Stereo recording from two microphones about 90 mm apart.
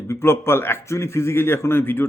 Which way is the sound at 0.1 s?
25° left (ahead or behind).